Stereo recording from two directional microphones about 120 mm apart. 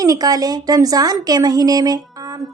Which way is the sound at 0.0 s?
30° right (ahead or behind).